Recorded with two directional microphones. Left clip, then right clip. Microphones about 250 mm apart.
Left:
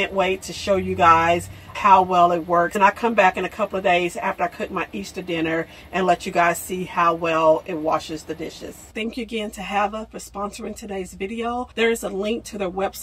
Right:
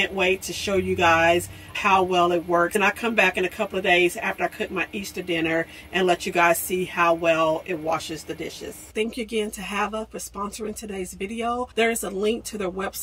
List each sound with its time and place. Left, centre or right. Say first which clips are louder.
0.1 s a woman's voice: left 1 dB; centre
8.9 s a woman's voice: right 2 dB; centre
10.9 s a woman's voice: left 2 dB; centre